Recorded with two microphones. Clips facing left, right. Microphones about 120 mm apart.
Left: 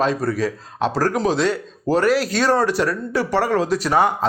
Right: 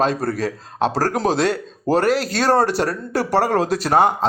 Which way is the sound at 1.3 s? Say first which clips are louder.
Right 1 dB; 50° right (ahead or behind).